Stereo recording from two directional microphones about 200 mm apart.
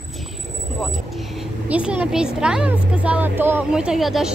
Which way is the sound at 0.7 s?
Centre (ahead or behind).